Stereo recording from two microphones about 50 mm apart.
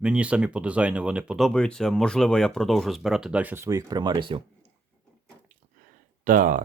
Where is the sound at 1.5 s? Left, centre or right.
Centre.